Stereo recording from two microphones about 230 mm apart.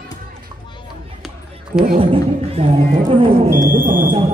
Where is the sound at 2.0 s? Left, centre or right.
Right.